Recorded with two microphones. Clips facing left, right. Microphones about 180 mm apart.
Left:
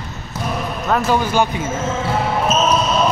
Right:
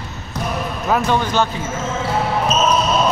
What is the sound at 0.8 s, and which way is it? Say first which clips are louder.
Speech: even; centre (ahead or behind).